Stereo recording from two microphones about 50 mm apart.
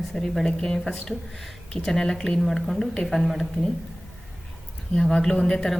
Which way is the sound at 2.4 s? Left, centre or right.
Centre.